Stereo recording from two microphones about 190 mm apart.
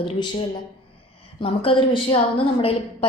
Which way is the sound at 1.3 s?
30° left (ahead or behind).